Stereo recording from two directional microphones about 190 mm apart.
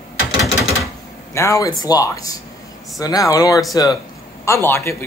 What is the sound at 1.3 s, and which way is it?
A woman's voice, 15° left (ahead or behind).